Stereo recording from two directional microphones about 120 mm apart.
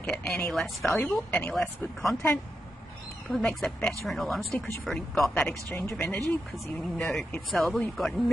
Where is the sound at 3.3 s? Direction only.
5° left (ahead or behind).